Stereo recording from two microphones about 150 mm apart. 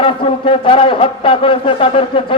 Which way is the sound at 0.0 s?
35° left (ahead or behind).